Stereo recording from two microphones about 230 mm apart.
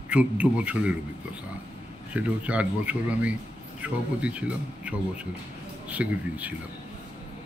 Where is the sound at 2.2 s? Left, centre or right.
Centre.